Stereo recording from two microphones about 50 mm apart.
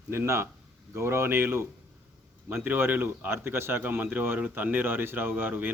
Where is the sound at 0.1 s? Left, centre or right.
Right.